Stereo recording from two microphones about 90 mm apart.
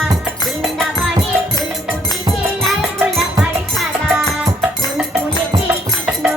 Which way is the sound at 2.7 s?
Centre (ahead or behind).